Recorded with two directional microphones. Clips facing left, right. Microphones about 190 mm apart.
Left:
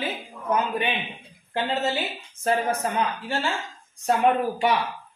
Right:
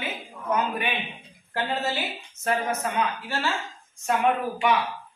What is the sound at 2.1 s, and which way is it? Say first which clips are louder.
Speech: left 3 dB; 35° left (ahead or behind).